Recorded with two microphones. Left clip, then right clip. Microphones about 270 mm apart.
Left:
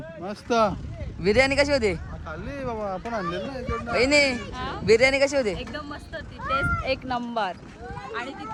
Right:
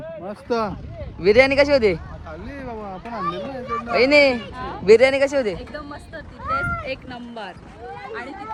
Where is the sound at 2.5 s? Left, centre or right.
Centre.